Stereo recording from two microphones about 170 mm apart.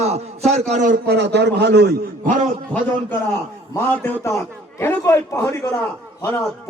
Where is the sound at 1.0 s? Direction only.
80° right.